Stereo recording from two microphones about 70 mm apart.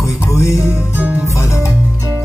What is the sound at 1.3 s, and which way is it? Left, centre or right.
Music, left.